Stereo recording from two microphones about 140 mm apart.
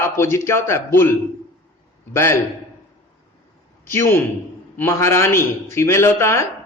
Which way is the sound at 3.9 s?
20° left (ahead or behind).